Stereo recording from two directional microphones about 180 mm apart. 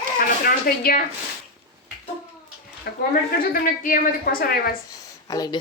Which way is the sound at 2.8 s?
55° left (ahead or behind).